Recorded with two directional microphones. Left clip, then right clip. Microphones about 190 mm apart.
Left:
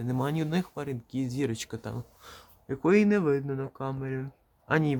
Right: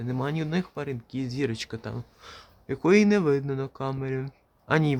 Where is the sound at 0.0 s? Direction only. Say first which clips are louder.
Even; 5° left (ahead or behind).